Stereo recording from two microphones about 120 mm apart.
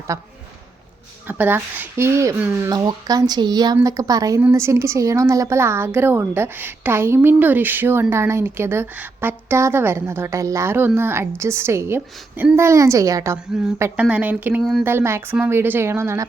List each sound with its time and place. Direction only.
0.1 s a woman's voice: 25° right (ahead or behind)
1.3 s speech: 15° right (ahead or behind)
2.6 s speech: 35° right (ahead or behind)
4.4 s a woman's voice: 20° right (ahead or behind)
13.9 s speech: 10° right (ahead or behind)
14.6 s speech: centre (ahead or behind)
14.8 s a woman's voice: 20° right (ahead or behind)